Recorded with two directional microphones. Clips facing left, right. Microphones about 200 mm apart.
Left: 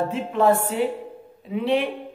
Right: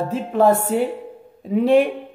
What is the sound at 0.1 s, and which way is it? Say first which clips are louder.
A man's voice: right 6 dB; 40° right (ahead or behind).